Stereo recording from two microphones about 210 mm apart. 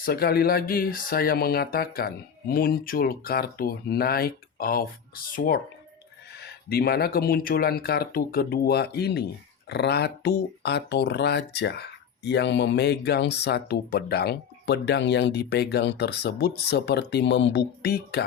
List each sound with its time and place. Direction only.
0.0 s speech: 50° left (ahead or behind)